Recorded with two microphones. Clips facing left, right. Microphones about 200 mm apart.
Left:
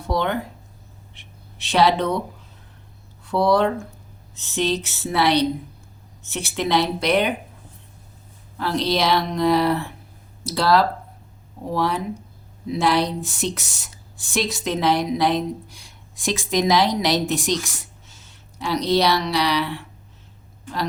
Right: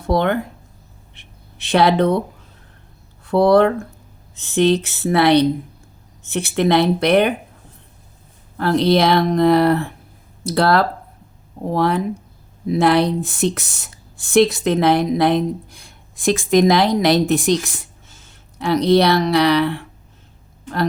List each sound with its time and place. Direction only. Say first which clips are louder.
0.1 s speech: right 5 dB; 55° right (ahead or behind)
3.2 s speech: right 6 dB; 55° right (ahead or behind)
8.5 s speech: right 7 dB; 55° right (ahead or behind)